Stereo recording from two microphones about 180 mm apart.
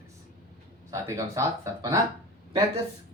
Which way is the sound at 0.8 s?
15° right (ahead or behind).